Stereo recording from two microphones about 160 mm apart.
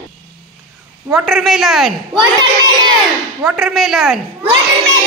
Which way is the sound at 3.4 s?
Centre (ahead or behind).